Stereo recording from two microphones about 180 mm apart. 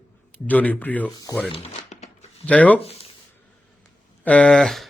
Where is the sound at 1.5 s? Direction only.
35° left (ahead or behind).